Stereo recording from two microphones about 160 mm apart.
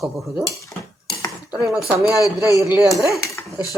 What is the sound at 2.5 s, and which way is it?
Speech, 20° right (ahead or behind).